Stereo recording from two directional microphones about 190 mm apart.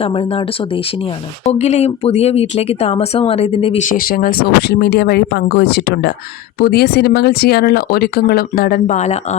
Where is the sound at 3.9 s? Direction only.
50° left (ahead or behind).